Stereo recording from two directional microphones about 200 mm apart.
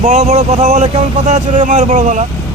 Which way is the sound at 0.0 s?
35° right (ahead or behind).